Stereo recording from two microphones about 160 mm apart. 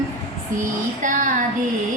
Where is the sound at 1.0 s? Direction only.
55° right (ahead or behind).